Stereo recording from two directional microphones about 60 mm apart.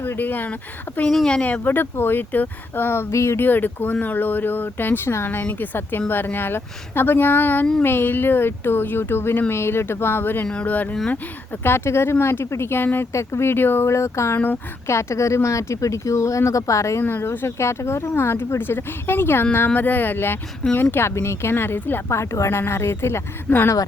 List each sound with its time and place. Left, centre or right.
0.0 s speech: left
1.1 s speech: centre
1.4 s speech: left
1.6 s speech: left
3.1 s speech: left
3.4 s speech: left
10.4 s speech: left
14.3 s speech: left
14.8 s speech: left
17.0 s speech: left
22.1 s speech: left